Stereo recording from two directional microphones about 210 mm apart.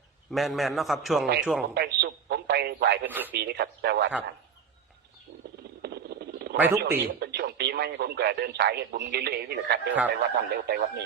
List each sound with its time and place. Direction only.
0.3 s a man's voice: centre (ahead or behind)
1.7 s speech: 50° right (ahead or behind)
3.1 s speech: 10° right (ahead or behind)
3.3 s speech: 50° right (ahead or behind)
5.8 s a sound: 50° right (ahead or behind)
6.6 s speech: 10° right (ahead or behind)
7.0 s speech: 50° right (ahead or behind)